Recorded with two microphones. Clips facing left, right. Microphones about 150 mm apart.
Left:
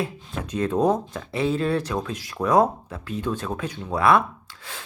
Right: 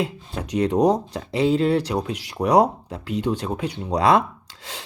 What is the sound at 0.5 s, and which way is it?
Speech, 15° right (ahead or behind).